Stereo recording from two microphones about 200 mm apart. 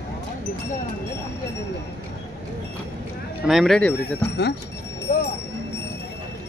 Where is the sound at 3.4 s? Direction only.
Centre (ahead or behind).